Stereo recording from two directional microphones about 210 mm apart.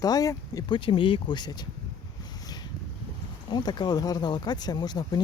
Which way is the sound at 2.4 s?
20° left (ahead or behind).